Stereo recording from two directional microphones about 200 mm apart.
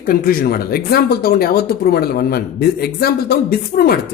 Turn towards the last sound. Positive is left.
turn(degrees=45)  # may be behind; listen again after turning